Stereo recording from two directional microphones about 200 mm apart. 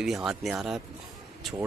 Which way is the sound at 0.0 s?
Centre (ahead or behind).